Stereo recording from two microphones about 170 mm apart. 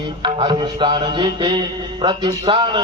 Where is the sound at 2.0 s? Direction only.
30° right (ahead or behind).